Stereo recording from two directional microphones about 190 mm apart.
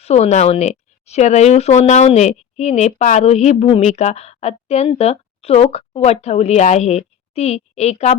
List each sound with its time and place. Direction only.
0.0 s speech: 35° left (ahead or behind)